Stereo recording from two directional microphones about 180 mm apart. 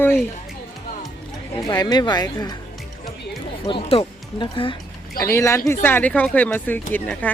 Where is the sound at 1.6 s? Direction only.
20° left (ahead or behind).